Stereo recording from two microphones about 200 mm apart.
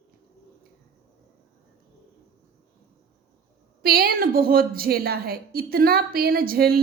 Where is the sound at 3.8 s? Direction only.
50° right (ahead or behind).